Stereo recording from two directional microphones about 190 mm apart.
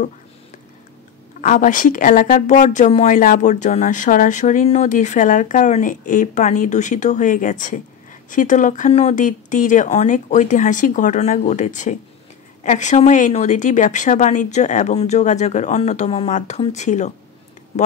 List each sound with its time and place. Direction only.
1.4 s speech: 45° left (ahead or behind)